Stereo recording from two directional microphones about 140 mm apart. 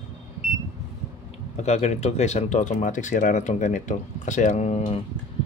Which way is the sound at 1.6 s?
55° left (ahead or behind).